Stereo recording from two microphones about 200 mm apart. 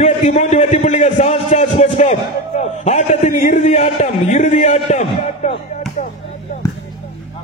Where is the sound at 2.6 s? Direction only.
35° left (ahead or behind).